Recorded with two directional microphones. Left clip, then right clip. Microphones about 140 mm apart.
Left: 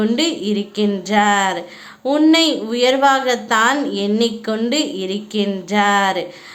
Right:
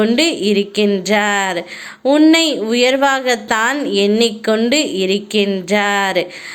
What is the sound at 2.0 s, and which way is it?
Speech, 15° right (ahead or behind).